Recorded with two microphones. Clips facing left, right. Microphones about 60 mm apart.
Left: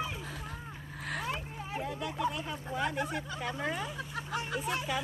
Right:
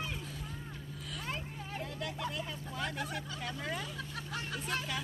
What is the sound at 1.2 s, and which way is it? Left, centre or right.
Vehicle, centre.